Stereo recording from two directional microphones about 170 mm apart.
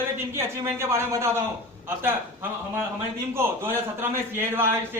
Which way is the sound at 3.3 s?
15° right (ahead or behind).